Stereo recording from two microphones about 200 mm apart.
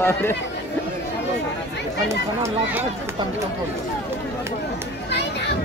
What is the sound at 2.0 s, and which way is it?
Speech, 15° right (ahead or behind).